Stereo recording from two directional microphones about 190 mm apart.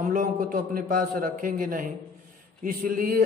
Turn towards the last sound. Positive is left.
turn(degrees=-45)  # may be behind; listen again after turning